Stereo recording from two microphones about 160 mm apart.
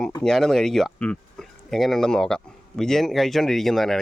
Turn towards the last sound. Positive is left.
turn(degrees=0)  # may be behind; listen again after turning